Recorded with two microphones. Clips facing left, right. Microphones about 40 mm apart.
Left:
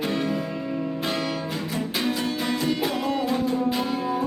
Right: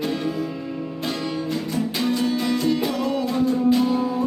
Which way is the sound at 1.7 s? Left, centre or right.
Centre.